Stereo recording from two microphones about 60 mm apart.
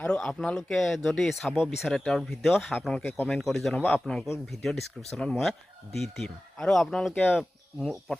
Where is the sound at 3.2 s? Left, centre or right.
Centre.